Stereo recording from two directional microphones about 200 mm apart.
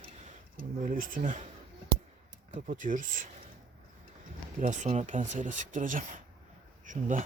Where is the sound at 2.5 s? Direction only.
40° right (ahead or behind).